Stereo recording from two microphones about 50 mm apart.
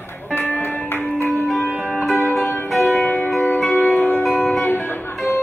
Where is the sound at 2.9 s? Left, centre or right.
Left.